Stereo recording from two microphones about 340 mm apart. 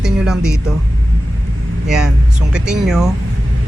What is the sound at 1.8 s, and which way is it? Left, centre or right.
Speech, centre.